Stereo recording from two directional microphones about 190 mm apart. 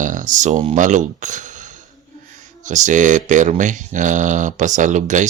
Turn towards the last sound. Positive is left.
turn(degrees=-40)  # may be behind; listen again after turning